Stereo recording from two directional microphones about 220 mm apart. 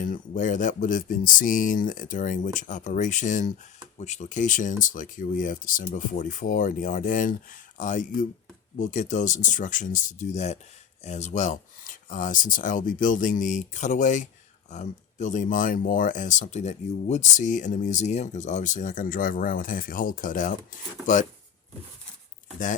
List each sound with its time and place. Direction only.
0.0 s speech: 35° left (ahead or behind)